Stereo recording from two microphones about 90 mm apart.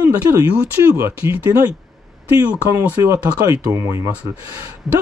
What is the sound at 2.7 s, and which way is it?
Speech, 30° right (ahead or behind).